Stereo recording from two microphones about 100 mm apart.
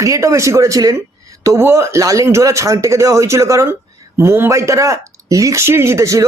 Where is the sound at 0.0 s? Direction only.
30° right (ahead or behind).